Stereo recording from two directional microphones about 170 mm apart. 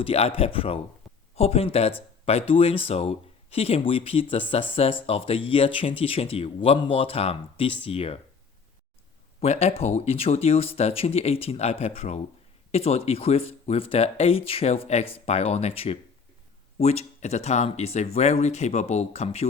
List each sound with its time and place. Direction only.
0.0 s speech: 35° left (ahead or behind)
1.0 s a sound: centre (ahead or behind)
1.4 s speech: 35° left (ahead or behind)
9.4 s speech: 40° left (ahead or behind)